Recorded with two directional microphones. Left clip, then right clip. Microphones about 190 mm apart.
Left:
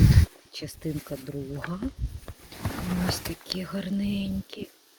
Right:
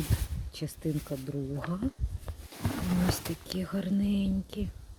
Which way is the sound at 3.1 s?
20° right (ahead or behind).